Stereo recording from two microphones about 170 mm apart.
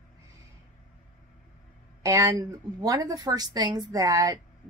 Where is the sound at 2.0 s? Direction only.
20° right (ahead or behind).